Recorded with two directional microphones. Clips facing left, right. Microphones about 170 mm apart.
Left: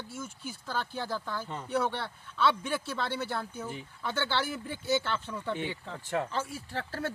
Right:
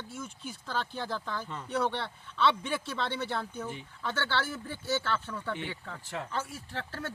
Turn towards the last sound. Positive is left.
turn(degrees=35)  # may be behind; listen again after turning